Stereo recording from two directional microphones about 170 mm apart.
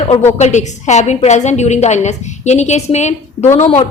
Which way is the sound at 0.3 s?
45° left (ahead or behind).